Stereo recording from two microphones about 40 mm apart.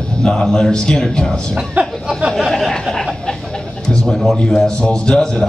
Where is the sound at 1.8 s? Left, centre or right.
Right.